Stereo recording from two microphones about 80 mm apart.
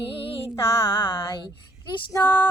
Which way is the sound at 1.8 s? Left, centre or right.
Left.